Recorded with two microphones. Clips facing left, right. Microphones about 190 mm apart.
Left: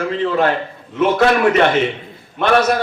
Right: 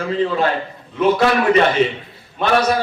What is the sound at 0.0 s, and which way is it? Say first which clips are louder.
A man's voice: left 1 dB; 55° left (ahead or behind).